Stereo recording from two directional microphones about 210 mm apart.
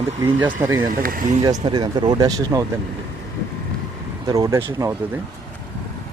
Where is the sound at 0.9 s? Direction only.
40° right (ahead or behind).